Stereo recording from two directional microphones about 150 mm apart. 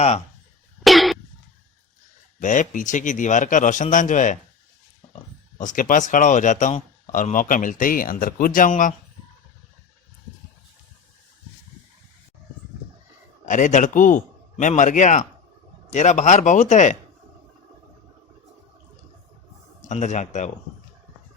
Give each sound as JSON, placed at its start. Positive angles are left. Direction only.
{"t": 0.9, "sound": "cough", "side_deg": 0}
{"t": 2.4, "sound": "a man's voice", "side_deg": 60}
{"t": 5.5, "sound": "a man's voice", "side_deg": 60}
{"t": 13.4, "sound": "a man's voice", "side_deg": 55}
{"t": 19.9, "sound": "speech", "side_deg": 50}